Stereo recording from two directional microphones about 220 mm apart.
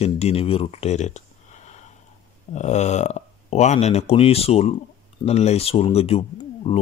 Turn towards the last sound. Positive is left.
turn(degrees=30)  # may be behind; listen again after turning